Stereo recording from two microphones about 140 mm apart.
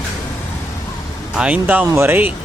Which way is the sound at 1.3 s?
10° right (ahead or behind).